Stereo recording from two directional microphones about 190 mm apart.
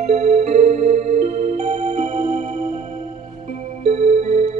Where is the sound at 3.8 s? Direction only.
35° right (ahead or behind).